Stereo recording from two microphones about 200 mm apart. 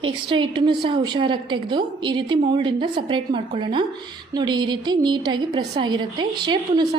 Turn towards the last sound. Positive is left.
turn(degrees=-20)  # may be behind; listen again after turning